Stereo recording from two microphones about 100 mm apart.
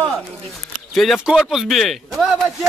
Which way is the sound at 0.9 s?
Centre (ahead or behind).